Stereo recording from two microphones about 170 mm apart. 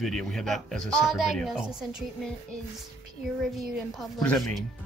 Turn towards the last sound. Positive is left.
turn(degrees=0)  # may be behind; listen again after turning